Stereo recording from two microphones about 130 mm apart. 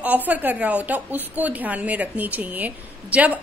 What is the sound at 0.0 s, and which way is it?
A woman's voice, 10° right (ahead or behind).